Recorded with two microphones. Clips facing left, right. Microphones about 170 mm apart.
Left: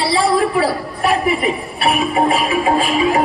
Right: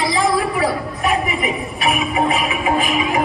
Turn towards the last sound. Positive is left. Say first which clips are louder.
# left 3 dB
turn(degrees=30)  # may be behind; listen again after turning